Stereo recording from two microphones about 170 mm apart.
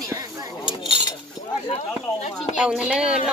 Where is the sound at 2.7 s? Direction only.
5° right (ahead or behind).